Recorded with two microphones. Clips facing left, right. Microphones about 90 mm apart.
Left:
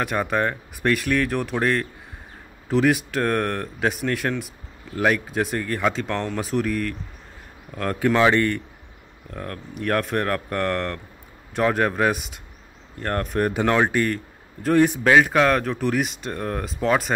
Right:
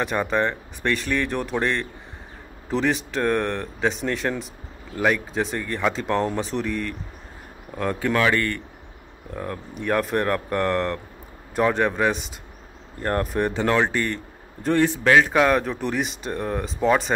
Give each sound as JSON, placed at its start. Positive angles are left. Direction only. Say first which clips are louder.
{"t": 0.0, "sound": "speech", "louder": "even", "side_deg": 0}
{"t": 8.0, "sound": "speech", "louder": "left 4 dB", "side_deg": 15}
{"t": 9.3, "sound": "speech", "louder": "right 2 dB", "side_deg": -15}
{"t": 9.8, "sound": "speech", "louder": "even", "side_deg": 0}
{"t": 13.7, "sound": "speech", "louder": "left 2 dB", "side_deg": 10}
{"t": 15.3, "sound": "speech", "louder": "even", "side_deg": -5}